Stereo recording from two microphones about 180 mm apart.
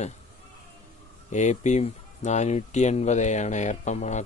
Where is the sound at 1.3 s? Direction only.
40° left (ahead or behind).